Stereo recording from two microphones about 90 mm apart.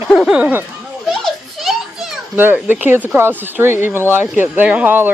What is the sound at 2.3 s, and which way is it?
Speech, 25° right (ahead or behind).